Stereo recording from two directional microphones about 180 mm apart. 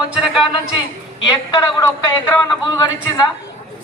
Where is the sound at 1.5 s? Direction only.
25° left (ahead or behind).